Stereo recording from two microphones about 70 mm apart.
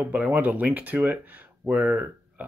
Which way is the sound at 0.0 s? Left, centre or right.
Right.